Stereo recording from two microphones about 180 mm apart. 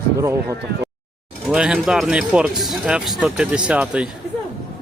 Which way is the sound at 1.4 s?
5° right (ahead or behind).